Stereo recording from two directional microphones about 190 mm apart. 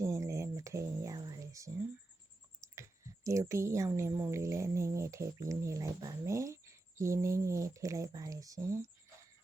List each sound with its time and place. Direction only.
0.0 s a sound: 15° right (ahead or behind)
2.6 s clicking: 15° right (ahead or behind)
3.5 s speech: 15° right (ahead or behind)